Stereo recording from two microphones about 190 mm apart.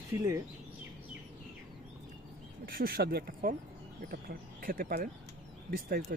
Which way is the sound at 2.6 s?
50° right (ahead or behind).